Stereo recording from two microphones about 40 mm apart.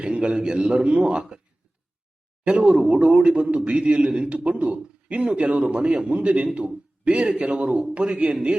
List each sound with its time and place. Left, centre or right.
0.0 s a man's voice: right
2.4 s a man's voice: right
4.4 s a man's voice: right